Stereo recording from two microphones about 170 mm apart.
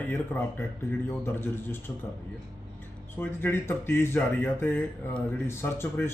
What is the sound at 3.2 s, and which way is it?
Speech, 10° left (ahead or behind).